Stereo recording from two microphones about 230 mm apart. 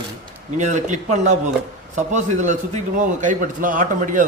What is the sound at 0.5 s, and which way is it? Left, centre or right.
A man's voice, right.